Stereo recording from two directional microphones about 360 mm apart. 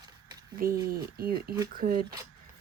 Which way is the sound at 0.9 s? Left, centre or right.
Right.